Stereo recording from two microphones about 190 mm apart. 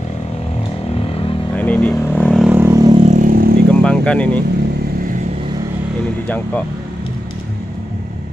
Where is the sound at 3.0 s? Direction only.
40° right (ahead or behind).